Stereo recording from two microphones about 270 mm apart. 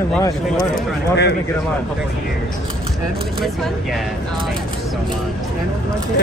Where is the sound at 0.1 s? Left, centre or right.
Centre.